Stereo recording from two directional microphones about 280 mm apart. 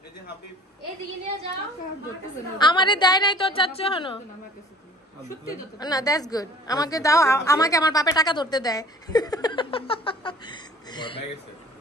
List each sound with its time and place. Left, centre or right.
2.6 s a woman's voice: centre
5.3 s a woman's voice: centre